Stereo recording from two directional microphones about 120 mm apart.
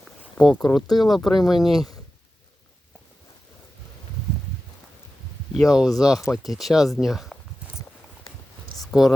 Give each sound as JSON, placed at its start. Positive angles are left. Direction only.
{"t": 0.3, "sound": "speech", "side_deg": 10}
{"t": 5.5, "sound": "speech", "side_deg": -5}
{"t": 8.8, "sound": "a sound", "side_deg": 0}